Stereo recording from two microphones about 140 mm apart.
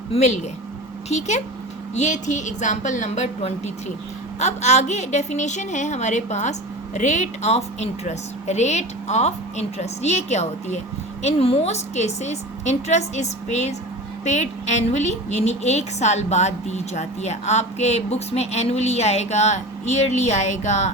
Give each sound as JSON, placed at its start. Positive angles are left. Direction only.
{"t": 0.1, "sound": "a woman's voice", "side_deg": 50}
{"t": 2.0, "sound": "a woman's voice", "side_deg": 60}